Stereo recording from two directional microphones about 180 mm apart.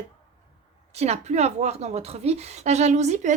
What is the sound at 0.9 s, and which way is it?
A woman's voice, 35° right (ahead or behind).